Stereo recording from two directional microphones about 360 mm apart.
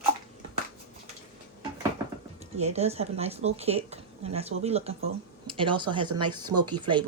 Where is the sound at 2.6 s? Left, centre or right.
Centre.